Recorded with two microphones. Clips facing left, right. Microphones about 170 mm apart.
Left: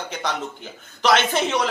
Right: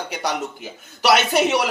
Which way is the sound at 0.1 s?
10° right (ahead or behind).